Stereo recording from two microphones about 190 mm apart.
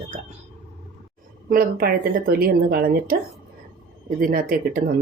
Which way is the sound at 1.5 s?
50° right (ahead or behind).